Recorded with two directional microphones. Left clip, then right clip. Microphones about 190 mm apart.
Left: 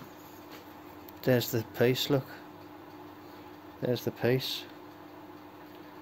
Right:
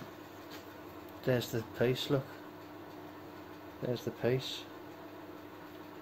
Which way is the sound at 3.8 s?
65° left (ahead or behind).